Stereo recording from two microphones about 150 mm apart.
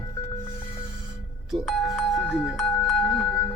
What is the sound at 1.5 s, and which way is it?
Speech, centre (ahead or behind).